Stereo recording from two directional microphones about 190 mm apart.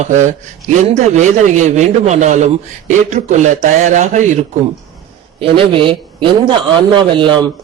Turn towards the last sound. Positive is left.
turn(degrees=-25)  # may be behind; listen again after turning